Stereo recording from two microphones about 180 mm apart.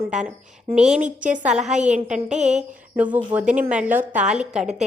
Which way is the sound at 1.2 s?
5° right (ahead or behind).